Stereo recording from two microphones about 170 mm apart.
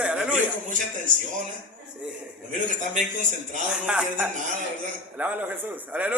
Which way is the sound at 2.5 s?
50° right (ahead or behind).